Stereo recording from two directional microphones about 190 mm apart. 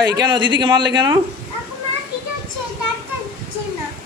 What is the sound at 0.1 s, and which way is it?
A man's voice, 20° right (ahead or behind).